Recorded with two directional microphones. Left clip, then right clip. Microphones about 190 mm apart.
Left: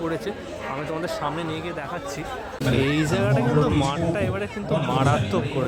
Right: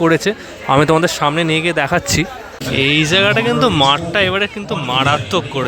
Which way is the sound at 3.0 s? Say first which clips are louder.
Right 10 dB; 5° right (ahead or behind).